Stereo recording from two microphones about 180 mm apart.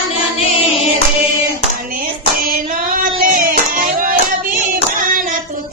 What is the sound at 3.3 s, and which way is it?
Music, 50° right (ahead or behind).